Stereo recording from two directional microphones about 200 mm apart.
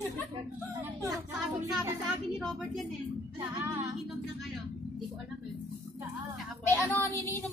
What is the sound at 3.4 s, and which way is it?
Speech, 10° right (ahead or behind).